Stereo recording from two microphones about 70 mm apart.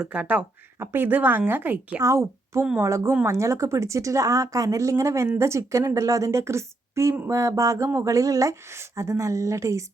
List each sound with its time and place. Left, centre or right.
0.1 s speech: centre
0.8 s speech: right
2.0 s a woman's voice: right